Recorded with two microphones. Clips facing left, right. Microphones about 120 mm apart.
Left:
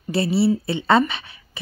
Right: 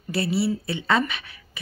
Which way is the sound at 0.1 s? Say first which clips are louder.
Left 5 dB; 30° left (ahead or behind).